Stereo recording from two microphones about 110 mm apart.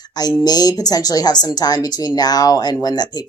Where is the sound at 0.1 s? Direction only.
35° left (ahead or behind).